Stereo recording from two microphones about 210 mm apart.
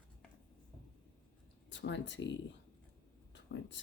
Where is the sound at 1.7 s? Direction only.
60° left (ahead or behind).